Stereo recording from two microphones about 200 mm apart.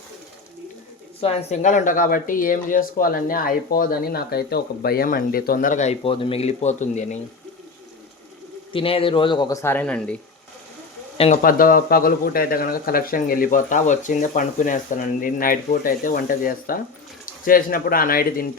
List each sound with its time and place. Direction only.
1.2 s speech: 30° left (ahead or behind)
8.7 s a man's voice: 25° left (ahead or behind); by 10.2 s 5° left (ahead or behind)
11.4 s speech: 45° left (ahead or behind)